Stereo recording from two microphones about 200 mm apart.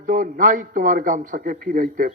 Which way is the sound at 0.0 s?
45° right (ahead or behind).